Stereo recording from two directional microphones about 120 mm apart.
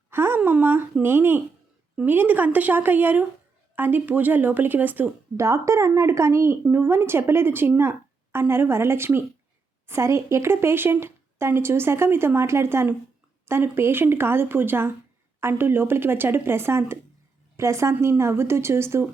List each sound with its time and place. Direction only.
0.1 s a woman's voice: 20° right (ahead or behind)